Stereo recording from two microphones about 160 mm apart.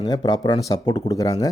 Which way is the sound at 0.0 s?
25° left (ahead or behind).